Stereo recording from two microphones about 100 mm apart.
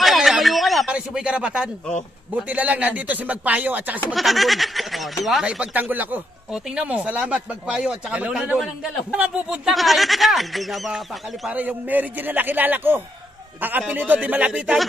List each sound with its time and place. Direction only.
0.0 s a sound: centre (ahead or behind)
2.4 s speech: 15° right (ahead or behind)
4.1 s a man's voice: centre (ahead or behind)
11.5 s speech: 15° right (ahead or behind)